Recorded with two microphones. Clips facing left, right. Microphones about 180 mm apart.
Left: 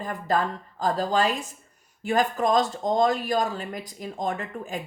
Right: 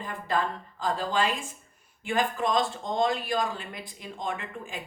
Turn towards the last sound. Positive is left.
turn(degrees=40)  # may be behind; listen again after turning